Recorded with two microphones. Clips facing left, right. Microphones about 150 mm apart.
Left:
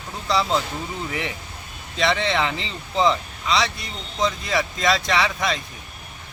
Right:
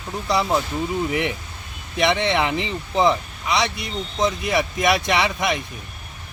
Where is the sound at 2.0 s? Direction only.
15° right (ahead or behind).